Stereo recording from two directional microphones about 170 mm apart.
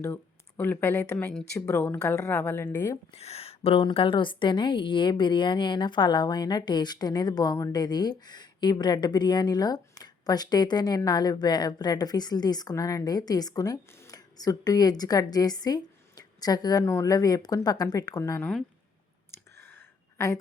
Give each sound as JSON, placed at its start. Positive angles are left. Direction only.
{"t": 0.0, "sound": "speech", "side_deg": 10}
{"t": 1.5, "sound": "speech", "side_deg": 15}
{"t": 3.1, "sound": "speech", "side_deg": 35}
{"t": 19.5, "sound": "a sound", "side_deg": 15}